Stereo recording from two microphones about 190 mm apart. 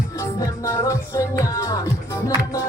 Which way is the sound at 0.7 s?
15° left (ahead or behind).